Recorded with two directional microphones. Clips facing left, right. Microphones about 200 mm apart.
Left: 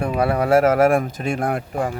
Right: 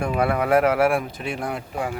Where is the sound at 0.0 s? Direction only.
35° left (ahead or behind).